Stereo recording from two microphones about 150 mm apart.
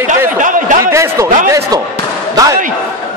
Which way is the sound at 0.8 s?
20° right (ahead or behind).